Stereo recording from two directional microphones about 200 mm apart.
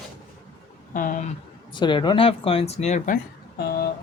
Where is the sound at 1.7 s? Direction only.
25° left (ahead or behind).